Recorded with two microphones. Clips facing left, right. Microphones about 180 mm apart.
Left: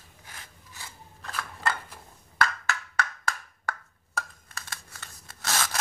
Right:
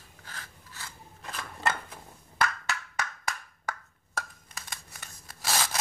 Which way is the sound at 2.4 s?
15° right (ahead or behind).